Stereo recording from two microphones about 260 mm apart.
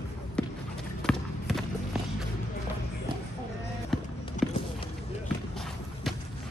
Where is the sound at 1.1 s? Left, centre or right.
Centre.